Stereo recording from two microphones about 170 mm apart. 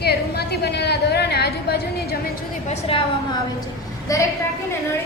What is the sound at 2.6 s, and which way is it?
Speech, 35° left (ahead or behind).